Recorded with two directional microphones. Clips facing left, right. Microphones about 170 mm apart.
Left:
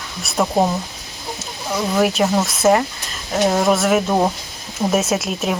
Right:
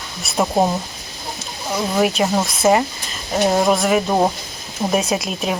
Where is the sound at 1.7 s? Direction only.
Centre (ahead or behind).